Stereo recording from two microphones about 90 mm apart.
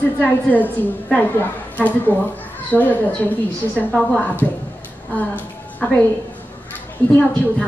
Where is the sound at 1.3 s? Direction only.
20° left (ahead or behind).